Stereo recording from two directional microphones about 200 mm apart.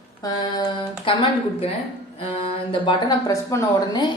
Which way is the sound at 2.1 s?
25° left (ahead or behind).